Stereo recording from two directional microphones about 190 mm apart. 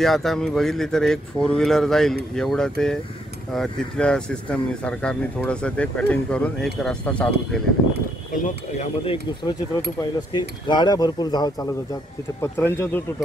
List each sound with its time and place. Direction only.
0.0 s speech: centre (ahead or behind)
8.5 s a man's voice: 35° left (ahead or behind); by 13.0 s 10° left (ahead or behind)